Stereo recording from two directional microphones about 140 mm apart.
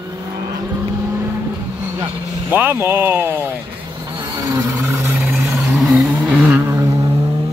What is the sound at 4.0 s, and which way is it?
Vehicle, 30° right (ahead or behind).